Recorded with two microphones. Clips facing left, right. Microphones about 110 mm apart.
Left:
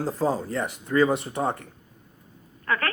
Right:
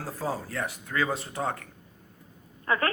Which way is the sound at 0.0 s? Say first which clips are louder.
Left 7 dB; 20° left (ahead or behind).